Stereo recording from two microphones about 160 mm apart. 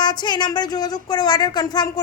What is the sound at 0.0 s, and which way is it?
A woman's voice, 25° left (ahead or behind).